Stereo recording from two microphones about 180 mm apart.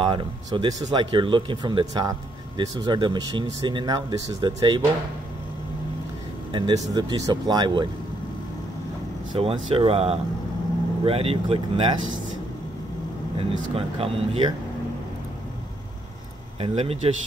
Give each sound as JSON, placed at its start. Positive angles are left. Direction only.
{"t": 0.0, "sound": "speech", "side_deg": -25}
{"t": 6.5, "sound": "speech", "side_deg": -25}
{"t": 9.3, "sound": "speech", "side_deg": -30}
{"t": 13.4, "sound": "speech", "side_deg": -30}
{"t": 16.5, "sound": "speech", "side_deg": -30}